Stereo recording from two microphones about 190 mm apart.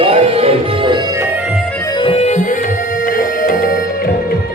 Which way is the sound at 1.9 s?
30° left (ahead or behind).